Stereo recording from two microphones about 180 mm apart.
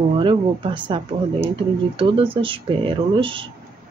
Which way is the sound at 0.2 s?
25° right (ahead or behind).